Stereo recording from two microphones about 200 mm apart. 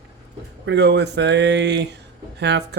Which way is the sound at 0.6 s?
60° right (ahead or behind).